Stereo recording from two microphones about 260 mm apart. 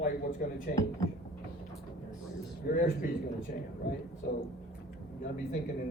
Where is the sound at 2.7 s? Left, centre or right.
Left.